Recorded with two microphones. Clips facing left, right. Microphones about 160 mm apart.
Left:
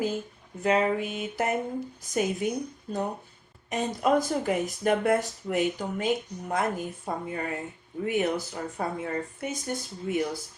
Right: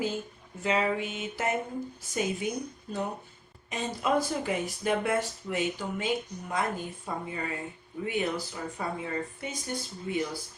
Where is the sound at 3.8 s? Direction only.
45° left (ahead or behind).